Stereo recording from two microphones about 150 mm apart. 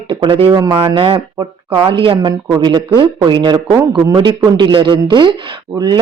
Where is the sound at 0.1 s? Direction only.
35° right (ahead or behind).